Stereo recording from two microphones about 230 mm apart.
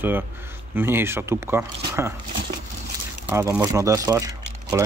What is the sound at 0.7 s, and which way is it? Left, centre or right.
Speech, centre.